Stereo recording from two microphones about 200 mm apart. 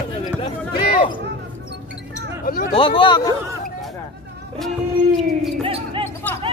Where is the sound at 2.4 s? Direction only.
45° left (ahead or behind).